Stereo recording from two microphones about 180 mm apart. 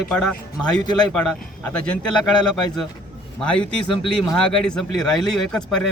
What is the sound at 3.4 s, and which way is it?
Speech, 5° left (ahead or behind).